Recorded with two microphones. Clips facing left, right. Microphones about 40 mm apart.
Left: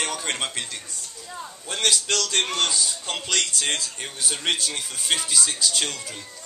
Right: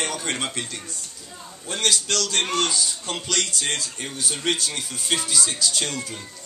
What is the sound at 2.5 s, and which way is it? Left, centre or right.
A man's voice, centre.